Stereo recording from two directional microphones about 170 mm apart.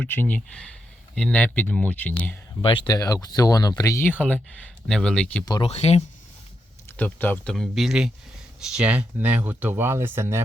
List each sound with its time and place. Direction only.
0.0 s speech: 10° left (ahead or behind)
2.6 s speech: 30° left (ahead or behind); by 5.4 s 5° left (ahead or behind)
5.6 s speech: 40° left (ahead or behind)
6.9 s speech: 10° left (ahead or behind); by 10.4 s 15° right (ahead or behind)